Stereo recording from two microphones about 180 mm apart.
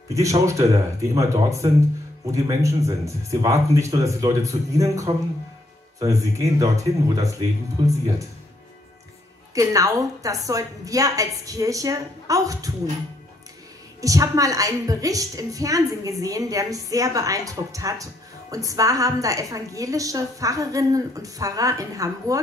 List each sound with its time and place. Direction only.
0.1 s a woman's voice: 15° right (ahead or behind)
9.5 s a woman's voice: 20° right (ahead or behind)
14.0 s a woman's voice: 20° right (ahead or behind)